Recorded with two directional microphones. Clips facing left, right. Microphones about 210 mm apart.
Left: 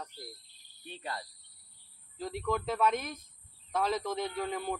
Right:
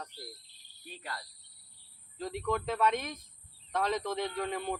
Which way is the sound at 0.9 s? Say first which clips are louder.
Left 3 dB; 25° left (ahead or behind).